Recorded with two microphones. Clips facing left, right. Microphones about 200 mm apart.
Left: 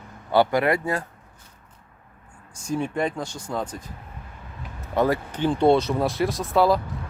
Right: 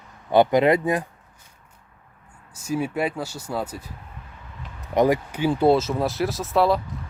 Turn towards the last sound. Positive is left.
turn(degrees=0)  # may be behind; listen again after turning